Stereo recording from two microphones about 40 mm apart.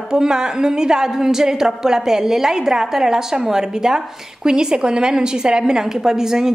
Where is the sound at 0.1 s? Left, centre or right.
Centre.